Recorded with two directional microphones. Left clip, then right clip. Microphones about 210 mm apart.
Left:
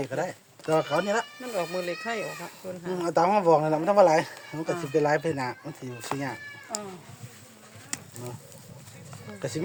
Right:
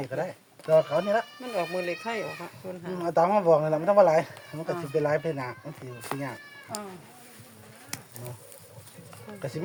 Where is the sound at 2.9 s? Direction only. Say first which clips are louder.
Even; 50° left (ahead or behind).